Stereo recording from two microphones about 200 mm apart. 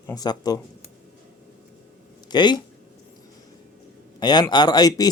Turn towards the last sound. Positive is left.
turn(degrees=20)  # may be behind; listen again after turning